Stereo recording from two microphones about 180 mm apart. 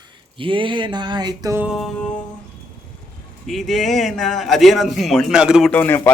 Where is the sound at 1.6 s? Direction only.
Centre (ahead or behind).